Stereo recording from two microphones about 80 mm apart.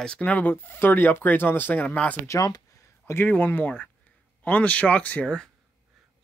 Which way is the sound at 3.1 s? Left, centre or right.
Left.